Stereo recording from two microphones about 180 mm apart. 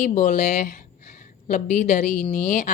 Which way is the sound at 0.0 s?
40° left (ahead or behind).